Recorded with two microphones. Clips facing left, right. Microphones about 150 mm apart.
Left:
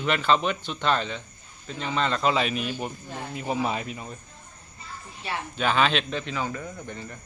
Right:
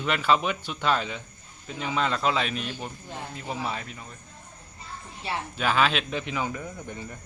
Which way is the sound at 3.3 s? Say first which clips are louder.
Left 6 dB; 15° left (ahead or behind).